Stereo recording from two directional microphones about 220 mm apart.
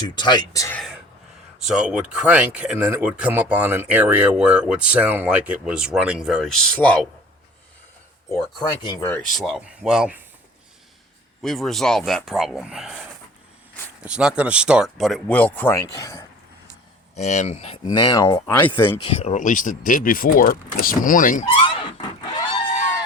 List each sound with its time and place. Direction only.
0.2 s speech: 20° left (ahead or behind)
1.6 s speech: 5° right (ahead or behind)
8.3 s speech: 20° left (ahead or behind); by 10.2 s 5° right (ahead or behind)
11.4 s speech: centre (ahead or behind)
17.2 s speech: 30° left (ahead or behind)
17.8 s speech: 20° left (ahead or behind)
19.0 s speech: 25° left (ahead or behind)